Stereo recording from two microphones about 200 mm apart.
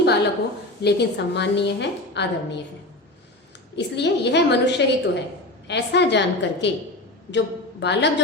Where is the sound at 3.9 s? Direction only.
60° left (ahead or behind).